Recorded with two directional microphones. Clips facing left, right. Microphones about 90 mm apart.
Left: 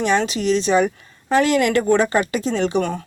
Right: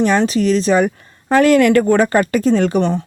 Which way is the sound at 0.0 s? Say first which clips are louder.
Right 5 dB; 40° right (ahead or behind).